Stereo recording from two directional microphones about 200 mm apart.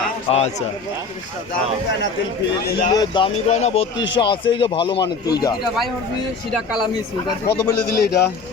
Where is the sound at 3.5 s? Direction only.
35° left (ahead or behind).